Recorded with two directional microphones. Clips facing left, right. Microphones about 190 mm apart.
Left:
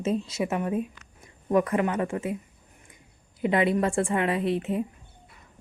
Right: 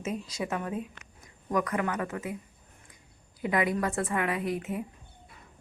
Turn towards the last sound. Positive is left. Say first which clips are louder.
# left 5 dB
turn(degrees=30)  # may be behind; listen again after turning